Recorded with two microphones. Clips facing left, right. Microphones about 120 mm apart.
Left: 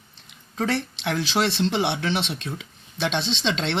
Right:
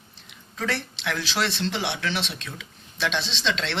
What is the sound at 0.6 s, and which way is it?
A woman's voice, 25° left (ahead or behind).